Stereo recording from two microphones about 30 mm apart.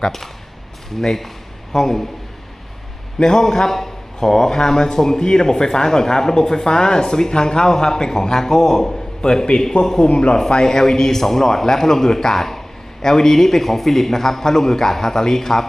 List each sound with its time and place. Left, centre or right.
0.0 s a man's voice: centre
3.2 s speech: left
10.0 s speech: left
10.6 s a man's voice: centre